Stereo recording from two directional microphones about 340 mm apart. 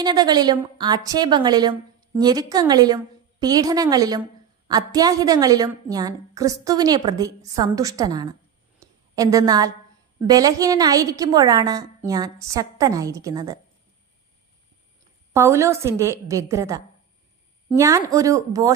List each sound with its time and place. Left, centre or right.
0.0 s a woman's voice: centre
8.8 s a sound: centre
10.2 s a woman's voice: centre
15.3 s a woman's voice: centre